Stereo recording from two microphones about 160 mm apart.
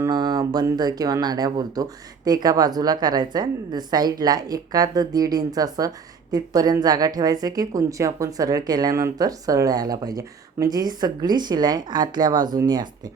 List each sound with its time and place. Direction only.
0.0 s speech: 25° right (ahead or behind)